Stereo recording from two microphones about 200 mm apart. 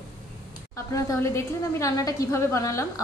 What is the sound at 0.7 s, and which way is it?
A woman's voice, 15° left (ahead or behind).